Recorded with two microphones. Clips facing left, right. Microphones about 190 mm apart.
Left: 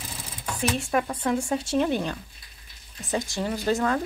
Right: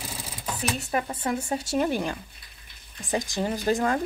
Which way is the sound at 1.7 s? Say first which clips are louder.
Even; 10° right (ahead or behind).